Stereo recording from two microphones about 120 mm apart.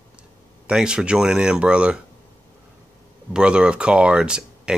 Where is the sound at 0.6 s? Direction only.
5° right (ahead or behind).